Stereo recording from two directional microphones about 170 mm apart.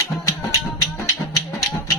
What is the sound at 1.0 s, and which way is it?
Music, 20° left (ahead or behind).